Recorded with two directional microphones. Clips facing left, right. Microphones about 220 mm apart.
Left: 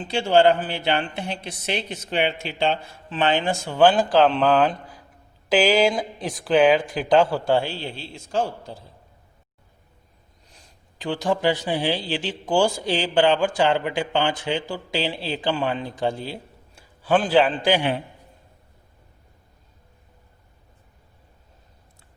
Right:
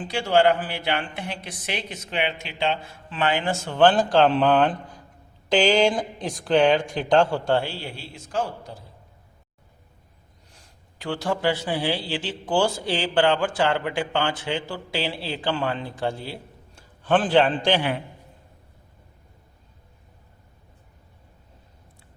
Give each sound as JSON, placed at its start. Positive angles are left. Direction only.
{"t": 0.0, "sound": "speech", "side_deg": 25}
{"t": 3.1, "sound": "a man's voice", "side_deg": 25}
{"t": 4.0, "sound": "a man's voice", "side_deg": -5}
{"t": 11.0, "sound": "a man's voice", "side_deg": 15}